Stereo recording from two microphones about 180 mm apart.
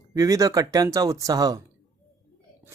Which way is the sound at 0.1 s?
20° right (ahead or behind).